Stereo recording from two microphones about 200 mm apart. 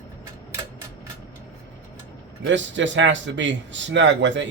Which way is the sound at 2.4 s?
65° right (ahead or behind).